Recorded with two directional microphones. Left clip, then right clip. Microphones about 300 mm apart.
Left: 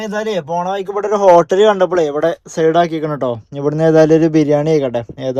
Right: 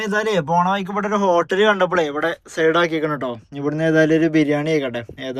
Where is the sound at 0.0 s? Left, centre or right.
Centre.